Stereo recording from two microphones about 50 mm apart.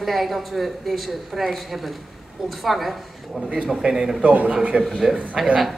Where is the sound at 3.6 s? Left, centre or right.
Right.